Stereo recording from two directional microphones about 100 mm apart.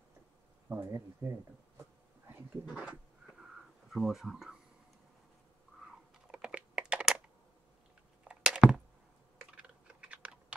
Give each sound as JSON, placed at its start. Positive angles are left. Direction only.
{"t": 0.7, "sound": "speech", "side_deg": -20}
{"t": 2.7, "sound": "speech", "side_deg": -15}
{"t": 3.3, "sound": "a sound", "side_deg": 0}
{"t": 6.2, "sound": "typing", "side_deg": -10}
{"t": 8.2, "sound": "a sound", "side_deg": -5}
{"t": 9.4, "sound": "typing", "side_deg": -10}